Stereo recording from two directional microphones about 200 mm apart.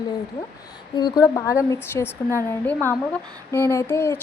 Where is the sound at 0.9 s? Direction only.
20° left (ahead or behind).